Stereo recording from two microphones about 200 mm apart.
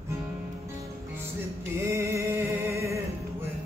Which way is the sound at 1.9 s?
15° right (ahead or behind).